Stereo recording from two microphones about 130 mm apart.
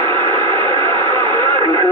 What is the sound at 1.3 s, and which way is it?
Radio, 30° left (ahead or behind).